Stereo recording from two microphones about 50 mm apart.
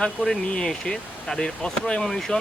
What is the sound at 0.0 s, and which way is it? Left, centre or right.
Speech, centre.